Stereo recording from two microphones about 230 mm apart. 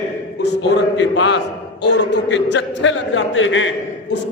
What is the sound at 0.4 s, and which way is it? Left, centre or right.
A man's voice, left.